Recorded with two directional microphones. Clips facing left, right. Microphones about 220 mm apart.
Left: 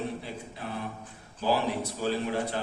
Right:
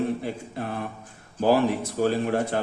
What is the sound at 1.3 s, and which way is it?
Speech, 55° right (ahead or behind).